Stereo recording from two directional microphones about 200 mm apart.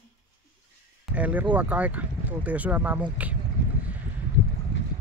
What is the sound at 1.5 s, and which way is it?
Speech, 10° right (ahead or behind).